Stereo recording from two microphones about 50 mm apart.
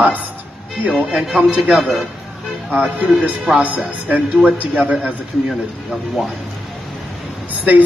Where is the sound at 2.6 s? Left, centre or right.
Centre.